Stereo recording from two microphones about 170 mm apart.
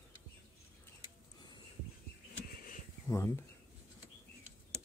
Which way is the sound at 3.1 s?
15° left (ahead or behind).